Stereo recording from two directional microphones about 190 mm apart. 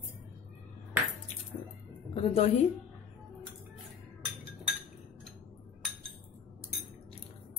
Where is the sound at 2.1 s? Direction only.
30° left (ahead or behind).